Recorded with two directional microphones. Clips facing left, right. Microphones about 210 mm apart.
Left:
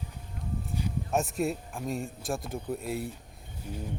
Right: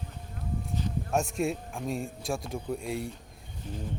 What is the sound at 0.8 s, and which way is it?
Speech, 5° left (ahead or behind).